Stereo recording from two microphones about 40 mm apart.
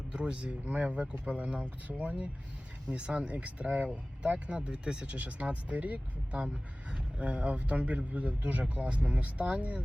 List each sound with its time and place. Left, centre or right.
0.1 s a man's voice: right
5.1 s a man's voice: right